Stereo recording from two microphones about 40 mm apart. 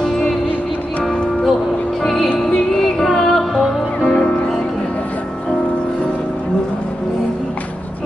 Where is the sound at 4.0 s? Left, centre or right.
Left.